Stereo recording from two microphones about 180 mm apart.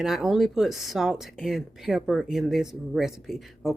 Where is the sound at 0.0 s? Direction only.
Centre (ahead or behind).